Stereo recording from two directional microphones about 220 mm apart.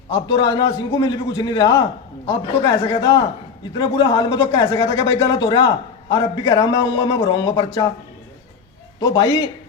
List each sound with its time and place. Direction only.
0.1 s a man's voice: 20° left (ahead or behind)
9.1 s speech: 15° left (ahead or behind)